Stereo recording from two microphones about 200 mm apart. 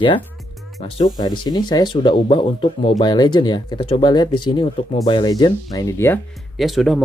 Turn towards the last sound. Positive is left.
turn(degrees=0)  # may be behind; listen again after turning